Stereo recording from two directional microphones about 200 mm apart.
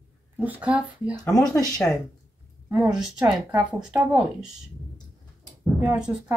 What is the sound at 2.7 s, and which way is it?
Speech, 5° right (ahead or behind).